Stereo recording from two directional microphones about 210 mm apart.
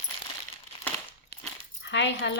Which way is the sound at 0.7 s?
25° left (ahead or behind).